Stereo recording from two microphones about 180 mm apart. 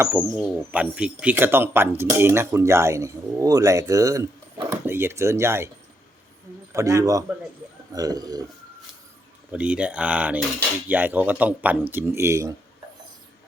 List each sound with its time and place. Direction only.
0.2 s speech: 5° right (ahead or behind)
6.7 s speech: 15° right (ahead or behind)
9.5 s speech: 5° right (ahead or behind)